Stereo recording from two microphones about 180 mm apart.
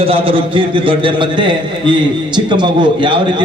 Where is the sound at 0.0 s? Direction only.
30° right (ahead or behind).